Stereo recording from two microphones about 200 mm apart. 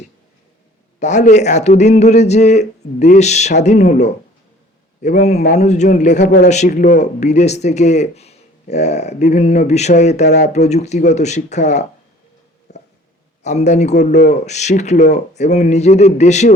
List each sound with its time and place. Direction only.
0.9 s speech: 35° left (ahead or behind)
12.7 s a sound: 35° left (ahead or behind)
13.4 s speech: 35° left (ahead or behind)